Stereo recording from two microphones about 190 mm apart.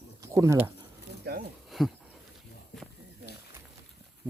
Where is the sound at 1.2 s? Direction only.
55° right (ahead or behind).